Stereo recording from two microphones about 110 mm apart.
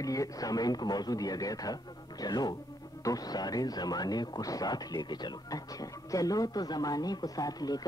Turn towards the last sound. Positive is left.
turn(degrees=35)  # may be behind; listen again after turning